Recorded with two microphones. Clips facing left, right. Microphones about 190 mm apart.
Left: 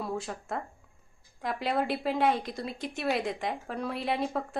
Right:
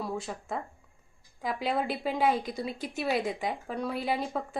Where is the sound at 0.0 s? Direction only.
Centre (ahead or behind).